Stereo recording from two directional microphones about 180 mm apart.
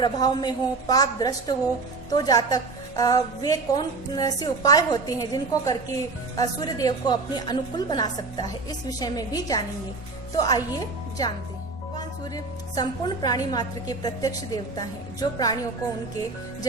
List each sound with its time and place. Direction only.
0.0 s a woman's voice: 20° left (ahead or behind)
11.9 s a woman's voice: 20° left (ahead or behind)